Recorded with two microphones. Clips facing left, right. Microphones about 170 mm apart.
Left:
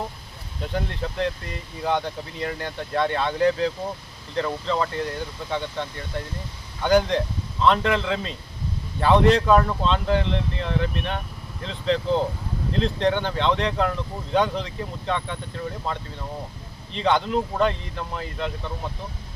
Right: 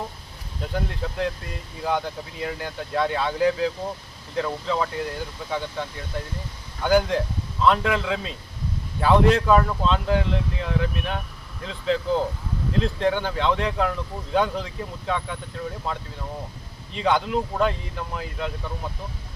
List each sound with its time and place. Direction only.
0.6 s speech: centre (ahead or behind)